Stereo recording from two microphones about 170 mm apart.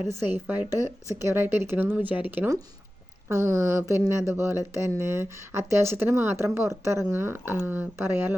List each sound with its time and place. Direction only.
0.1 s speech: 10° right (ahead or behind)